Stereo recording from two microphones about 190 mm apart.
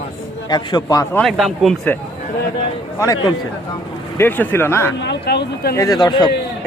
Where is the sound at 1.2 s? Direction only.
Centre (ahead or behind).